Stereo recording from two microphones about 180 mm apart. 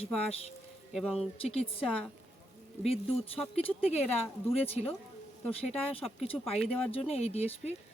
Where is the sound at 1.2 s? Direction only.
35° left (ahead or behind).